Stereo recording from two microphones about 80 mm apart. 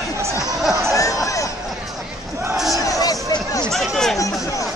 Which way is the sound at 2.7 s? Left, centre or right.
Left.